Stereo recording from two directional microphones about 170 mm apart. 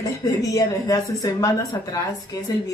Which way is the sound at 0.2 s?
20° left (ahead or behind).